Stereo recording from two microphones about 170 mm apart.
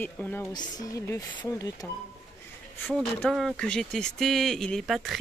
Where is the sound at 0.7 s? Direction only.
20° left (ahead or behind).